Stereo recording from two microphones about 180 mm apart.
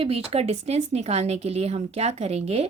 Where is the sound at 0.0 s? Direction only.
35° right (ahead or behind).